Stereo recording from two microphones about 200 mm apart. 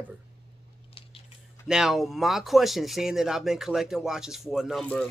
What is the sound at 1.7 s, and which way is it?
Speech, centre (ahead or behind).